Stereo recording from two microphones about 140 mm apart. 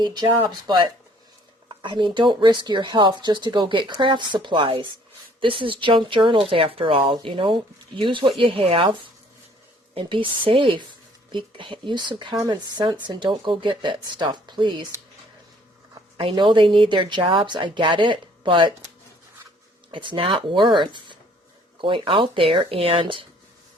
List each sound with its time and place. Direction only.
0.0 s speech: 30° right (ahead or behind)
9.9 s speech: 35° right (ahead or behind)
16.1 s speech: 35° right (ahead or behind)
19.9 s speech: 35° right (ahead or behind)